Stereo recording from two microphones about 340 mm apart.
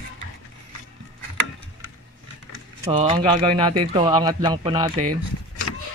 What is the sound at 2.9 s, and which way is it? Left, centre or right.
Speech, centre.